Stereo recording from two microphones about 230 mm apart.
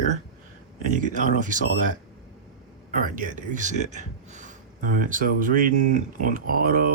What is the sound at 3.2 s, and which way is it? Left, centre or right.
A man's voice, right.